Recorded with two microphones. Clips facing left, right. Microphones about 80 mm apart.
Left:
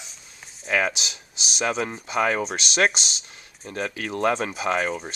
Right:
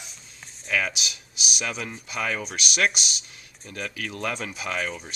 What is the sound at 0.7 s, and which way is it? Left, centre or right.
Speech, left.